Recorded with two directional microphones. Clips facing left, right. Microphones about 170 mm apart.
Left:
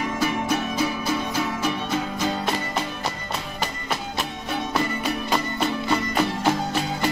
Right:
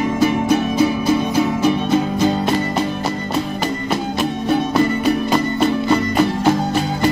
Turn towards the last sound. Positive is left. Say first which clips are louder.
# right 7 dB
turn(degrees=-45)  # may be behind; listen again after turning